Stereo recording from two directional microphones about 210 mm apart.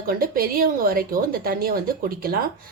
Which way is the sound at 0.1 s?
45° right (ahead or behind).